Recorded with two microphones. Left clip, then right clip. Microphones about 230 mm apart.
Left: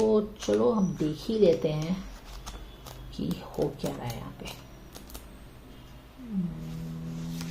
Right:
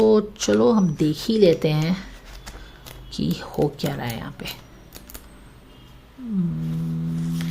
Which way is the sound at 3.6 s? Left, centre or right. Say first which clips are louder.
Right 7 dB; right.